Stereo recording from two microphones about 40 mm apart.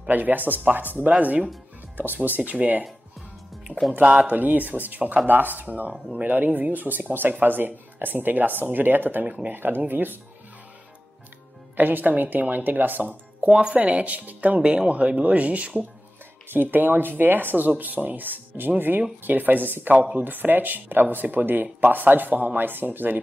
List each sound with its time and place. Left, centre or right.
0.1 s speech: right
3.9 s speech: right
9.2 s speech: right
9.5 s speech: right
11.7 s speech: right
13.5 s speech: right
13.7 s speech: right
16.5 s speech: right
22.7 s speech: right